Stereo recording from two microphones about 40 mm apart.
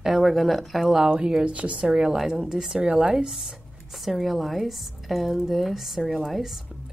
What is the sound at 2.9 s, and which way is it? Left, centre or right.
A woman's voice, centre.